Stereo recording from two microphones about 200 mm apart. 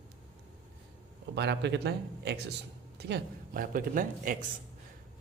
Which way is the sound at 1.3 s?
55° right (ahead or behind).